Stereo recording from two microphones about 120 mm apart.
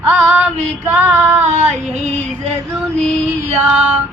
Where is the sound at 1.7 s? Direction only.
70° right (ahead or behind).